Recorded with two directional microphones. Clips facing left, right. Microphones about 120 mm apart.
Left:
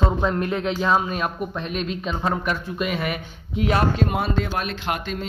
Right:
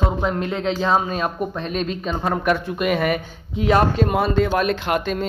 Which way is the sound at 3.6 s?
40° right (ahead or behind).